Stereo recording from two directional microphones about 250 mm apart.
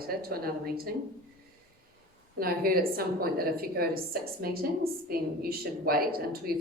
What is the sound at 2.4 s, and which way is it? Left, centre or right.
A woman's voice, right.